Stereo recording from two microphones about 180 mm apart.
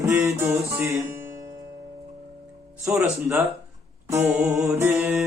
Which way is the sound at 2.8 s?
15° right (ahead or behind).